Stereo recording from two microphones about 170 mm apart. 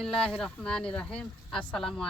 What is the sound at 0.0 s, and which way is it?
A woman's voice, 5° left (ahead or behind).